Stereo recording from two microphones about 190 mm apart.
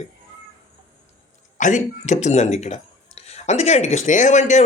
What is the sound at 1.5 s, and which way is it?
Speech, 40° left (ahead or behind).